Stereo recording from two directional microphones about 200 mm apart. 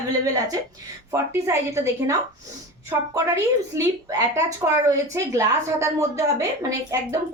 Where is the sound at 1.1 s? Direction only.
15° right (ahead or behind).